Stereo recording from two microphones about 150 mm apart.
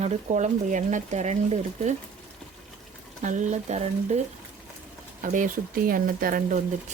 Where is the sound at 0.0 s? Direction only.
50° right (ahead or behind).